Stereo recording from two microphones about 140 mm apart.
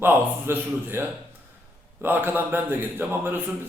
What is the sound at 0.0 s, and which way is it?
A man's voice, 15° right (ahead or behind).